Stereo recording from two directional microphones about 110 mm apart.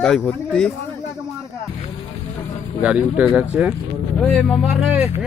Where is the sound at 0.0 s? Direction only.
10° left (ahead or behind).